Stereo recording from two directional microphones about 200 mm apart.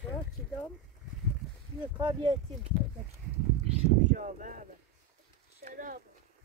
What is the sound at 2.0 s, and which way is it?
Speech, 20° right (ahead or behind).